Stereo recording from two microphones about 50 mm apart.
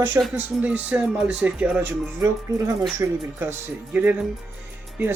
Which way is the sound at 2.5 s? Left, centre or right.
Right.